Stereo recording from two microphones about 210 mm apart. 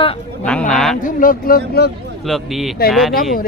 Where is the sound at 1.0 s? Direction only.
40° left (ahead or behind).